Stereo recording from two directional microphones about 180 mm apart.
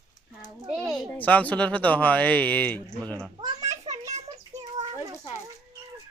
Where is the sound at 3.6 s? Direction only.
40° right (ahead or behind).